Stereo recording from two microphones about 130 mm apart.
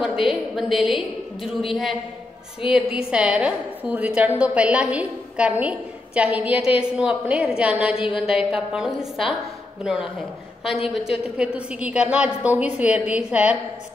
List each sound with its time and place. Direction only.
0.0 s a woman's voice: 5° right (ahead or behind)
10.6 s a woman's voice: centre (ahead or behind)